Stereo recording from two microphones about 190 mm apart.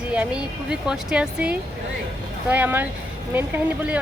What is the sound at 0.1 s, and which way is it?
Speech, 5° right (ahead or behind).